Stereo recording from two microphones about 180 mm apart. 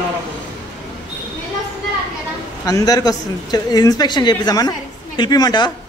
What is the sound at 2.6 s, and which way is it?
A woman's voice, 20° left (ahead or behind).